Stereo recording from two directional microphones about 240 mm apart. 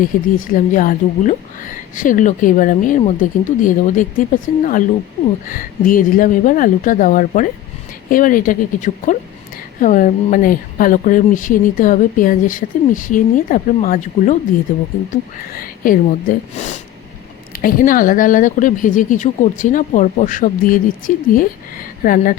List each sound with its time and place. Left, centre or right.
0.0 s speech: left